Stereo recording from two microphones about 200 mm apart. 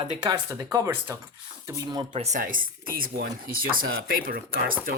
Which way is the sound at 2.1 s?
35° right (ahead or behind).